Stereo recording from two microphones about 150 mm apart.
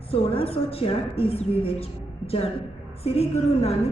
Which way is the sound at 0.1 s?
40° left (ahead or behind).